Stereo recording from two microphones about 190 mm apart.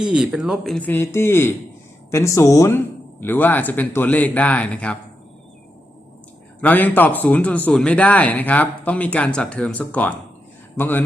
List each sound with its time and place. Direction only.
0.0 s speech: 5° right (ahead or behind)
6.6 s speech: 10° left (ahead or behind)